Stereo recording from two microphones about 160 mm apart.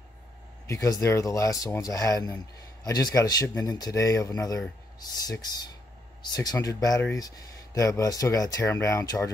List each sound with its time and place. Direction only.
0.7 s speech: 20° left (ahead or behind)